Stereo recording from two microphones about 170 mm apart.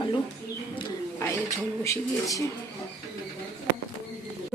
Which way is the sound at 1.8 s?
20° left (ahead or behind).